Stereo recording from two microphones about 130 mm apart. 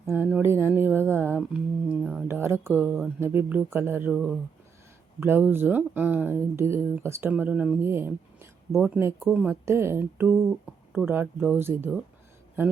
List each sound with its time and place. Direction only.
0.4 s speech: 20° right (ahead or behind)
9.2 s speech: 10° right (ahead or behind)
9.6 s speech: 20° right (ahead or behind)
10.3 s speech: 5° right (ahead or behind)
11.0 s speech: 15° right (ahead or behind)